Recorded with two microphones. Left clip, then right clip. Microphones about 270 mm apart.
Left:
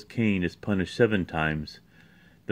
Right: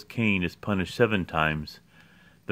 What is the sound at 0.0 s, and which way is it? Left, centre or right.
Speech, centre.